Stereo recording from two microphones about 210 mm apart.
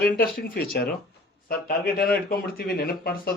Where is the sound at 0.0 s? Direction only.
45° left (ahead or behind).